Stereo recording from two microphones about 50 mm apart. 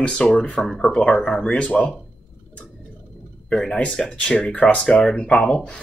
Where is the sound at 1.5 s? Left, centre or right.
Left.